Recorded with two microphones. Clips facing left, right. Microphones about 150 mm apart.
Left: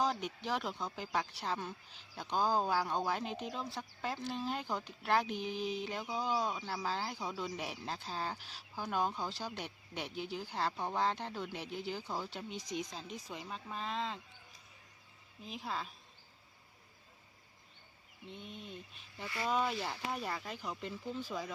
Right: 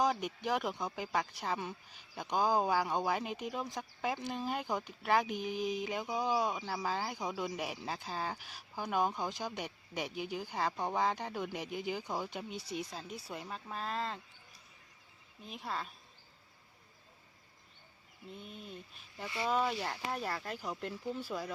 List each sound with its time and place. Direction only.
0.0 s speech: 10° right (ahead or behind)
15.4 s speech: centre (ahead or behind)
18.3 s speech: 5° right (ahead or behind)
19.2 s speech: 20° right (ahead or behind)
19.5 s speech: 5° right (ahead or behind)